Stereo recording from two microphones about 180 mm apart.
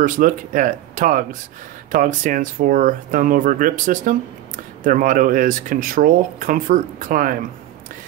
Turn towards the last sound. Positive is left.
turn(degrees=-50)  # may be behind; listen again after turning